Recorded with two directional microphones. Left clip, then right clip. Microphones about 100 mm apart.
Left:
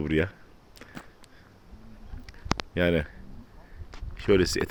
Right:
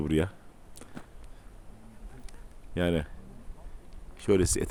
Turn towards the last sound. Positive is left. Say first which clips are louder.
# left 3 dB
turn(degrees=-5)  # may be behind; listen again after turning